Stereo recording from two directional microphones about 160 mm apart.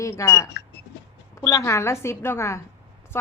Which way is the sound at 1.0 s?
90° left.